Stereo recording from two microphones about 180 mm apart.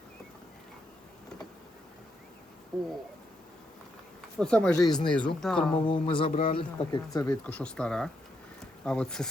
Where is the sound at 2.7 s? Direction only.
5° left (ahead or behind).